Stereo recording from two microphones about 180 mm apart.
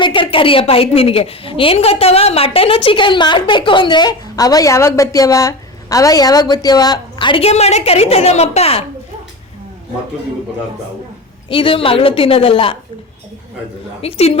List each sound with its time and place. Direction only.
0.0 s a woman's voice: 25° left (ahead or behind)
11.4 s a woman's voice: 30° left (ahead or behind)
14.0 s a woman's voice: 35° left (ahead or behind)